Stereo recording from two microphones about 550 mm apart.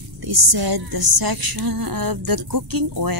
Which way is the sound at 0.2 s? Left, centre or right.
Right.